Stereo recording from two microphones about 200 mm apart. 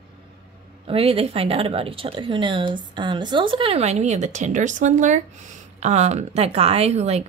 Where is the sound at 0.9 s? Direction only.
30° right (ahead or behind).